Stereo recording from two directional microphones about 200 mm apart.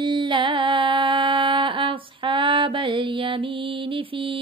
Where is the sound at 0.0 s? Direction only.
25° right (ahead or behind).